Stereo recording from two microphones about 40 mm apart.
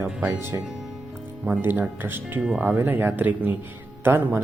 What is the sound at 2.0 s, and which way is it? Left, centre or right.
Speech, right.